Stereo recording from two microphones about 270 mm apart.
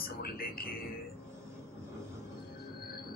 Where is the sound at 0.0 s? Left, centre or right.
Left.